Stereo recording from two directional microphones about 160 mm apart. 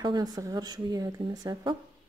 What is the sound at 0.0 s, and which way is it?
Speech, 25° right (ahead or behind).